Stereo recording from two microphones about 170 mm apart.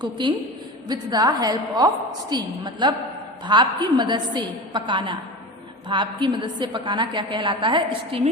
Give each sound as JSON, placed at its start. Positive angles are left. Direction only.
{"t": 0.0, "sound": "a woman's voice", "side_deg": -25}